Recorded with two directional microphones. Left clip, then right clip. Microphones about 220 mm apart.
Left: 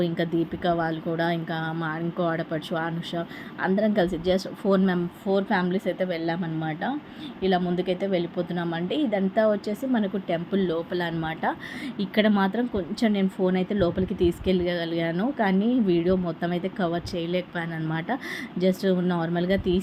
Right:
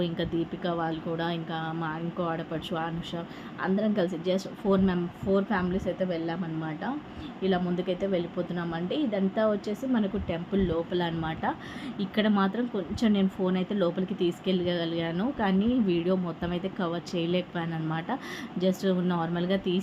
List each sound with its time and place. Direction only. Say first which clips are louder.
0.0 s speech: left 4 dB; 15° left (ahead or behind)